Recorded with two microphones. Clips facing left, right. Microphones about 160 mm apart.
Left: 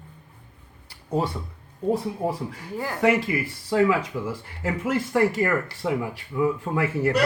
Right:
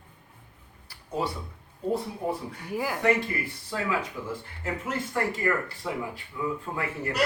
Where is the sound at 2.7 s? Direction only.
10° right (ahead or behind).